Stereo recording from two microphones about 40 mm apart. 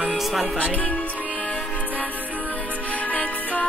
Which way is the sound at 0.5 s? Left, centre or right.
Left.